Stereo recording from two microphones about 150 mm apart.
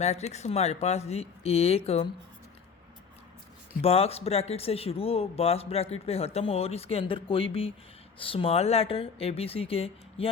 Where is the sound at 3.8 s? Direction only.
40° left (ahead or behind).